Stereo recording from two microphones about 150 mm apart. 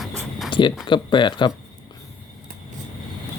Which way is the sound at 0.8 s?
30° left (ahead or behind).